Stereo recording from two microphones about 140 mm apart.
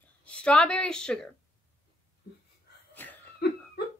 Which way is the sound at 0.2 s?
5° left (ahead or behind).